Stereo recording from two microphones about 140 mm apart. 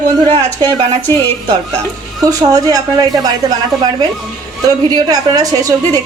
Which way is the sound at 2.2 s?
25° right (ahead or behind).